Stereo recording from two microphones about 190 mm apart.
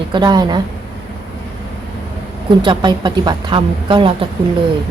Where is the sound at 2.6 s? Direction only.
25° right (ahead or behind).